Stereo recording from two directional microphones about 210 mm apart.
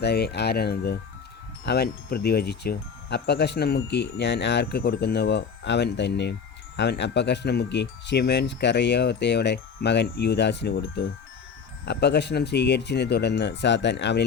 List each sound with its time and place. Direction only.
0.0 s speech: 50° left (ahead or behind)